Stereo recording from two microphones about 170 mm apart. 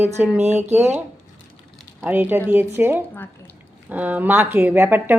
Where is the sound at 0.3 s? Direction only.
40° right (ahead or behind).